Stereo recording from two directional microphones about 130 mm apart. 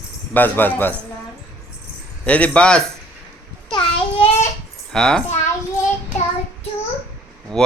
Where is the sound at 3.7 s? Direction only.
45° left (ahead or behind).